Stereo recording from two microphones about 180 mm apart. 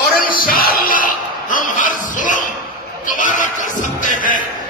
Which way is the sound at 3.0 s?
45° left (ahead or behind).